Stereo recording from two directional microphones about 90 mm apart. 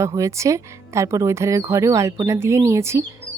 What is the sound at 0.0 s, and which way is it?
Speech, 35° right (ahead or behind).